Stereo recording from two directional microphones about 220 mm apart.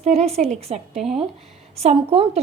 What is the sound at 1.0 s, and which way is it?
Speech, centre (ahead or behind).